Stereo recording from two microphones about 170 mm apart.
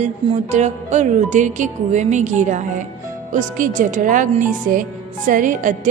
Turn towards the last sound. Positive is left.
turn(degrees=-50)  # may be behind; listen again after turning